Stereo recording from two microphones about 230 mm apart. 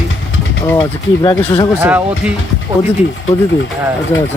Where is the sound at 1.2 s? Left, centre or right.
Centre.